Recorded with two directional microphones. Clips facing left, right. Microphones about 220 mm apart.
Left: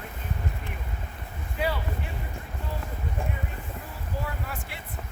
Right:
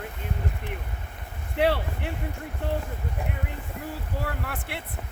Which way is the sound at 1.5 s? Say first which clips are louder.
Right 6 dB; 70° right (ahead or behind).